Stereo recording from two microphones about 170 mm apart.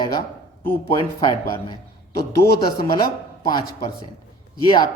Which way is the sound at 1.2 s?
25° left (ahead or behind).